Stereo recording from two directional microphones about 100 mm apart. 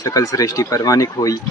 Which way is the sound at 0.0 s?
35° left (ahead or behind).